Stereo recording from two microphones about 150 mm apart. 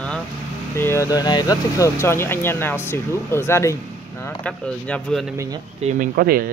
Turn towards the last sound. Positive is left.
turn(degrees=-75)  # may be behind; listen again after turning